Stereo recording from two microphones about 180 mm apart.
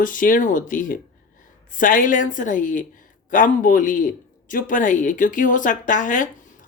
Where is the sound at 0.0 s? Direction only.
50° left (ahead or behind).